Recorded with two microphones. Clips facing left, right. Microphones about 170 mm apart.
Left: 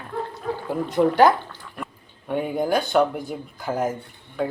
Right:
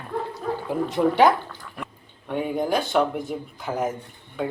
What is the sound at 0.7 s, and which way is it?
Speech, centre (ahead or behind).